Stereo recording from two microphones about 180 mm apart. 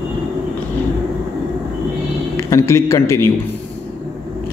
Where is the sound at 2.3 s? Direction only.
15° left (ahead or behind).